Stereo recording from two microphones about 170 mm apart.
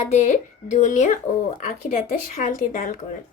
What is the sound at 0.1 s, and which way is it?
A woman's voice, 45° left (ahead or behind).